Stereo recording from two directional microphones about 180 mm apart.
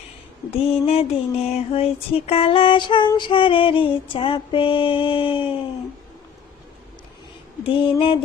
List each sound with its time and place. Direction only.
0.5 s a sound: 35° left (ahead or behind)
3.1 s female singing: 25° left (ahead or behind)
7.6 s female singing: 30° left (ahead or behind)